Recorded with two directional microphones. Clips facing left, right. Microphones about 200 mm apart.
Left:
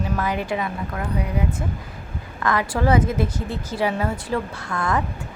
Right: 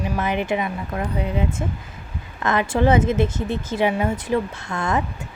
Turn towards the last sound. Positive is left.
turn(degrees=-25)  # may be behind; listen again after turning